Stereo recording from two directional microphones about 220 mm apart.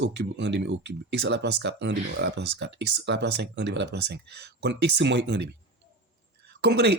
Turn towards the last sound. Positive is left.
turn(degrees=-50)  # may be behind; listen again after turning